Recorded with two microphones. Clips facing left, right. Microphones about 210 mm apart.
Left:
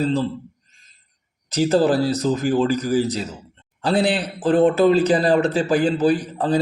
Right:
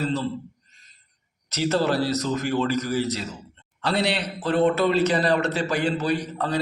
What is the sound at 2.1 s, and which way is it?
A man's voice, 35° left (ahead or behind).